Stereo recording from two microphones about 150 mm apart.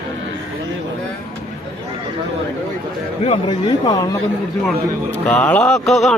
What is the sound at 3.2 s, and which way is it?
Speech, 40° left (ahead or behind).